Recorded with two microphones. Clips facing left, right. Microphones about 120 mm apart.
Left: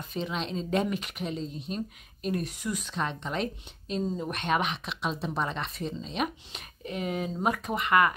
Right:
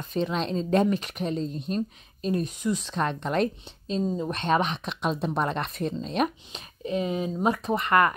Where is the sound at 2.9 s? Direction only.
45° right (ahead or behind).